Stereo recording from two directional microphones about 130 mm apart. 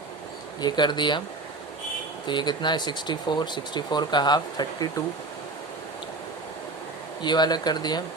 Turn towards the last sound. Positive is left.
turn(degrees=30)  # may be behind; listen again after turning